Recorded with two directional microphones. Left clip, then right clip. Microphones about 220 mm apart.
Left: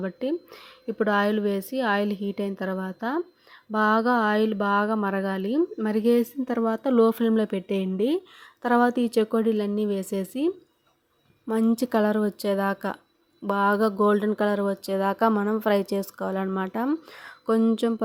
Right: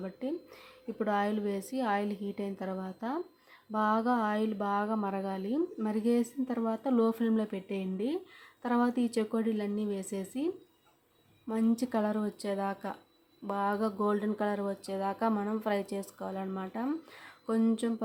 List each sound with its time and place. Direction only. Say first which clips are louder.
0.0 s speech: left 9 dB; 20° left (ahead or behind)